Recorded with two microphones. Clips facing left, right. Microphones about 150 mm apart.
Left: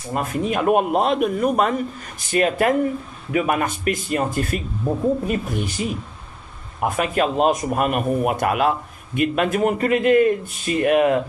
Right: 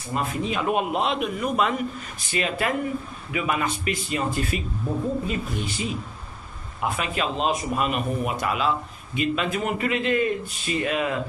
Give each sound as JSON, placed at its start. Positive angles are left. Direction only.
{"t": 0.1, "sound": "a man's voice", "side_deg": 50}